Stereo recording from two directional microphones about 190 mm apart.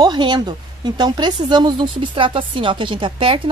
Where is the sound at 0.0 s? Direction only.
25° right (ahead or behind).